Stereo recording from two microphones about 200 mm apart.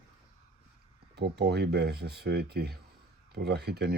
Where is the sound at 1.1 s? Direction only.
55° right (ahead or behind).